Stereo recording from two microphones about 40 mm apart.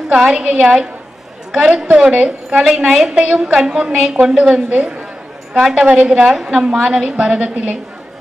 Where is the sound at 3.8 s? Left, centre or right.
Right.